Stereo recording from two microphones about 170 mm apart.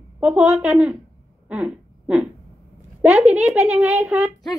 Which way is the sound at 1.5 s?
5° right (ahead or behind).